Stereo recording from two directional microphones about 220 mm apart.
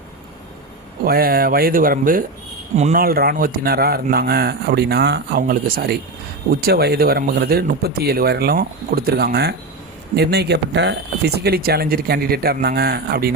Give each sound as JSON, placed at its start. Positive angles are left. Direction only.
{"t": 1.0, "sound": "speech", "side_deg": -40}